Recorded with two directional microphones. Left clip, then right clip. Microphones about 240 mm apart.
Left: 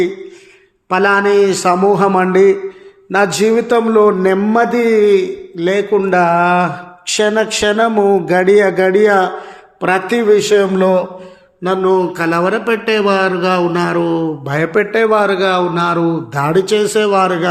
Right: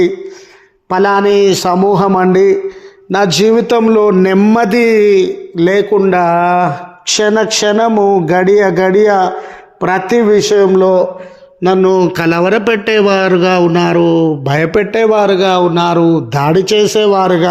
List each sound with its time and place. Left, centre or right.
0.9 s a man's voice: right